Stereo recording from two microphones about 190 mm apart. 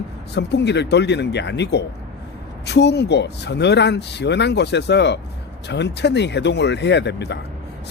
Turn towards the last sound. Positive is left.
turn(degrees=65)  # may be behind; listen again after turning